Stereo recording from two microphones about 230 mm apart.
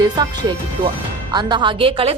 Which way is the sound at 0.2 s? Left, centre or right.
Centre.